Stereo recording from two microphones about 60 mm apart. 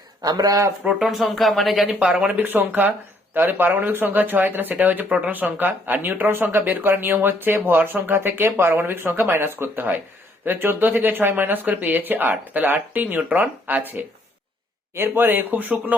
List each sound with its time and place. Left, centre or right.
0.2 s speech: right
1.0 s speech: centre
2.4 s speech: right